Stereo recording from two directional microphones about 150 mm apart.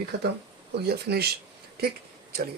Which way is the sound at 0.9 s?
90° right.